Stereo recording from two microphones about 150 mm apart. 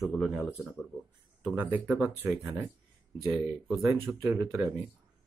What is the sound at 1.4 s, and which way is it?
Speech, 10° right (ahead or behind).